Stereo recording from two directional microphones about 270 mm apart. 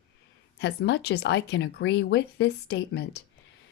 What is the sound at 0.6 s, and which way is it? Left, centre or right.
A woman's voice, left.